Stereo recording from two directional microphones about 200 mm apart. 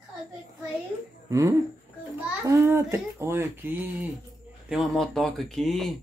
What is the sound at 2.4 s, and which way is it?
Speech, 15° right (ahead or behind).